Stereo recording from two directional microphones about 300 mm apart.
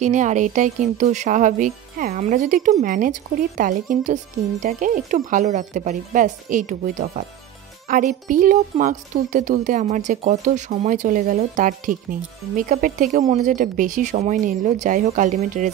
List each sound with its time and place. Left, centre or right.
0.0 s speech: right